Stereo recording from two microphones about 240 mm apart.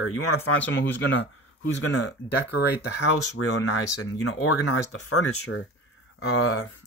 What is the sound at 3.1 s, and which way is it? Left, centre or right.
Speech, left.